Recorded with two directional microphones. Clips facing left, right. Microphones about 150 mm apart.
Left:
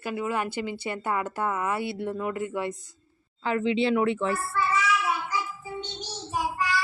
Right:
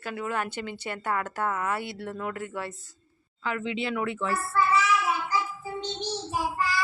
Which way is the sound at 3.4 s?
30° left (ahead or behind).